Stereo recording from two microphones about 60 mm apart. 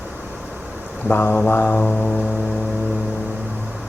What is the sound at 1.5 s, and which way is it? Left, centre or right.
Mantra, left.